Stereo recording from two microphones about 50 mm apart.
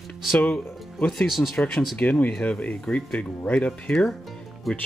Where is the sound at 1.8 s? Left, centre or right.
Left.